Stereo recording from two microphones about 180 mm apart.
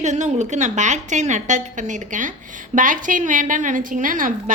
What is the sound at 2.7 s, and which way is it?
A woman's voice, 50° right (ahead or behind).